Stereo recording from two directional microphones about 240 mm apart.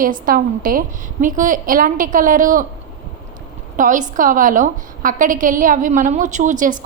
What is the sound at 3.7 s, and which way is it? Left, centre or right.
A woman's voice, right.